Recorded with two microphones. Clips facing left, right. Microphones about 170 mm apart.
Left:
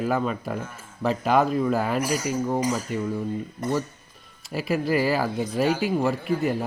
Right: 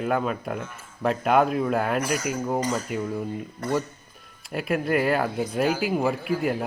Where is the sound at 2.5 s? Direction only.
10° left (ahead or behind).